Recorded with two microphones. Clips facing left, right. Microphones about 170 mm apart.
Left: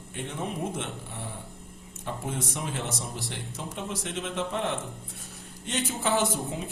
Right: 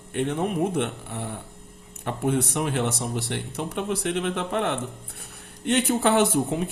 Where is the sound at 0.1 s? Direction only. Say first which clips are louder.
Right 9 dB; 60° right (ahead or behind).